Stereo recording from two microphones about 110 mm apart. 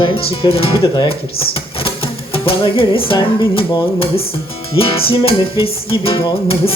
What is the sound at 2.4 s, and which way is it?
Music, 55° left (ahead or behind).